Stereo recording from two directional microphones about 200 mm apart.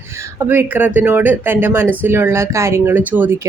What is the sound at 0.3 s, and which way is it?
Speech, 10° right (ahead or behind).